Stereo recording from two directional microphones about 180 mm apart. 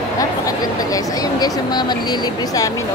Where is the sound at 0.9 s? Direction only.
20° left (ahead or behind).